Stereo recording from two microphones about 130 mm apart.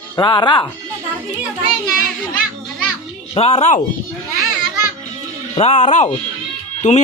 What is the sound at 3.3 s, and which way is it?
Speech, 55° left (ahead or behind).